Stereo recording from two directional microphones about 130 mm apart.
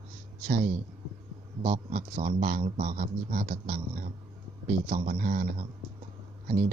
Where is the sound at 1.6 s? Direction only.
85° right.